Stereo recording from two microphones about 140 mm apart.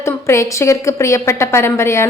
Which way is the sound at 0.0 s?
20° left (ahead or behind).